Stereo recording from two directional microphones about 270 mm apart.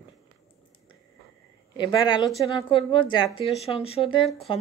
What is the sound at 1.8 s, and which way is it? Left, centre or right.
Speech, centre.